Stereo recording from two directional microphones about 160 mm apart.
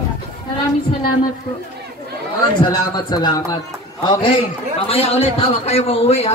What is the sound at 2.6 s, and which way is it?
A man's voice, 30° left (ahead or behind).